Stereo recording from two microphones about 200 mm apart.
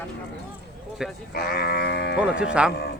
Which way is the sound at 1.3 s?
50° left (ahead or behind).